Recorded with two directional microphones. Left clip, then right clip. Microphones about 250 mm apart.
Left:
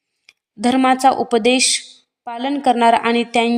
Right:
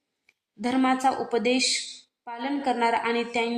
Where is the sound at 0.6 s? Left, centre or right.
Left.